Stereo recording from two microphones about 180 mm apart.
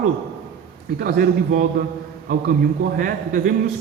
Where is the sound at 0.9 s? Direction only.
55° right (ahead or behind).